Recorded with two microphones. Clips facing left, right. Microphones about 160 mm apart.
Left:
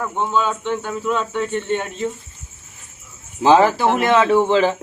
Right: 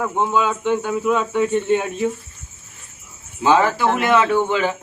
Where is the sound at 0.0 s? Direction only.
10° right (ahead or behind).